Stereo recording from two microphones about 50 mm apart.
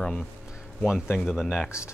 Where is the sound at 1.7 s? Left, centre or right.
Left.